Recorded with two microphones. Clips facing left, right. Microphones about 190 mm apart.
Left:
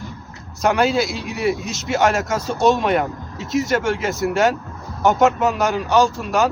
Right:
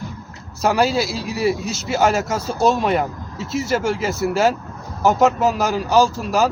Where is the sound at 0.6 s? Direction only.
5° right (ahead or behind).